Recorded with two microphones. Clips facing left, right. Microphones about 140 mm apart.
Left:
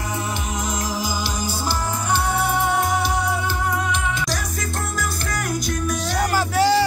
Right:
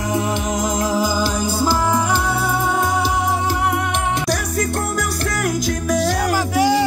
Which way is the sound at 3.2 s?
65° right (ahead or behind).